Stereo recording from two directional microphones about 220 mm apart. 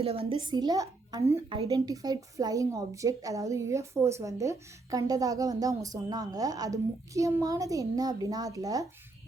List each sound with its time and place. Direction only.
0.0 s a woman's voice: 25° right (ahead or behind)